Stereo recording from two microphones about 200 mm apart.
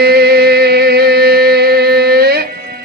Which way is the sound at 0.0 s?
50° right (ahead or behind).